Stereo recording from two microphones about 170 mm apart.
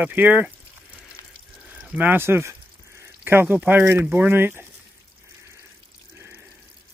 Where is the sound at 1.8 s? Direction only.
10° right (ahead or behind).